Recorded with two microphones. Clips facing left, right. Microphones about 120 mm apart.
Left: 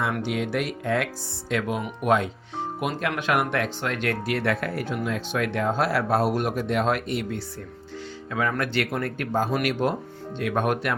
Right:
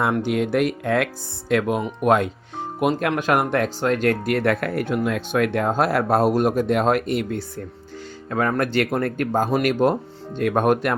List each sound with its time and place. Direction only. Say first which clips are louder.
0.2 s speech: right 6 dB; 50° right (ahead or behind)
3.1 s speech: right 4 dB; 40° right (ahead or behind)